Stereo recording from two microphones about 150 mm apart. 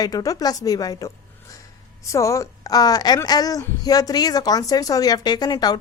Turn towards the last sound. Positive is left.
turn(degrees=25)  # may be behind; listen again after turning